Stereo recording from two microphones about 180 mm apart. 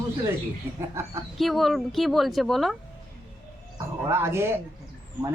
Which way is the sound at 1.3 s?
Centre (ahead or behind).